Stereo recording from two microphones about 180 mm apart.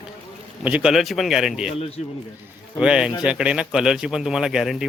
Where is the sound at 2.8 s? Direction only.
5° right (ahead or behind).